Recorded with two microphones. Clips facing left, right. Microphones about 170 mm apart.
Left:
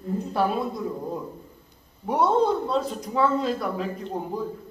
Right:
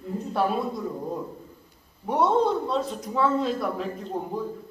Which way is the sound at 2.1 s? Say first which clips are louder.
Left 1 dB; centre (ahead or behind).